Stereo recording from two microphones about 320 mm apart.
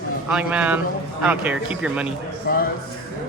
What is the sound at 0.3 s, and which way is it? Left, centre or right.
Speech, centre.